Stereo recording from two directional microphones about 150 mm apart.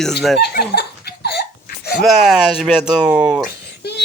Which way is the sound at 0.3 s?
90° left.